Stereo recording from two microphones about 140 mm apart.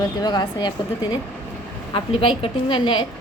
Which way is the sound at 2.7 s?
35° left (ahead or behind).